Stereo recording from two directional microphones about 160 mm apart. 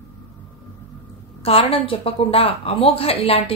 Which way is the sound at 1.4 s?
35° left (ahead or behind).